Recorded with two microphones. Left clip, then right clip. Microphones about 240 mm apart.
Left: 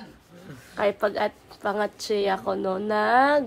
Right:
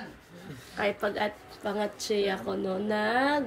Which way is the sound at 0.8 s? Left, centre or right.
Left.